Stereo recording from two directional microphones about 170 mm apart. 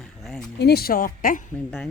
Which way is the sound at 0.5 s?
70° left (ahead or behind).